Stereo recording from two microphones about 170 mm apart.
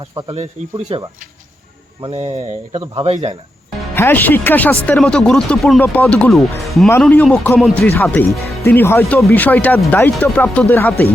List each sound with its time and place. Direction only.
2.0 s a man's voice: 35° right (ahead or behind)
3.9 s speech: 10° left (ahead or behind)
6.8 s speech: 10° left (ahead or behind)